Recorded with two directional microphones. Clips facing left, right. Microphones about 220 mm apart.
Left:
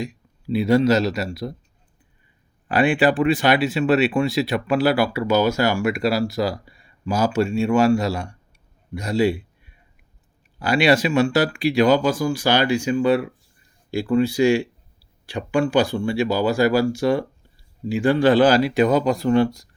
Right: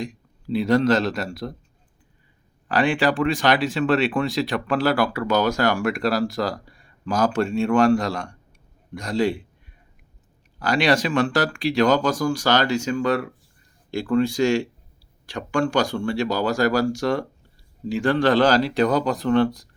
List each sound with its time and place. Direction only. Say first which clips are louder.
0.4 s speech: left 2 dB; 10° left (ahead or behind)
2.6 s speech: left 3 dB; 15° left (ahead or behind)
10.6 s speech: left 2 dB; 10° left (ahead or behind)